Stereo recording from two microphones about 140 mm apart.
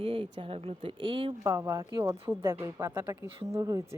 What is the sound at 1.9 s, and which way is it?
Speech, 35° right (ahead or behind).